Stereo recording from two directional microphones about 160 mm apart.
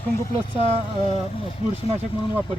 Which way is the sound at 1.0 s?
40° left (ahead or behind).